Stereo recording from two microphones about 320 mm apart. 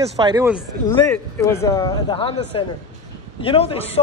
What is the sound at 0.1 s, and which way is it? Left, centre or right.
Speech, centre.